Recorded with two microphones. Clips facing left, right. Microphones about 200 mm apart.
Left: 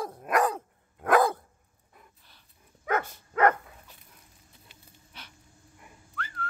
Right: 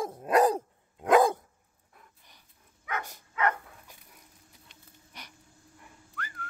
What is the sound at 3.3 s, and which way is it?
Dog, 50° left (ahead or behind).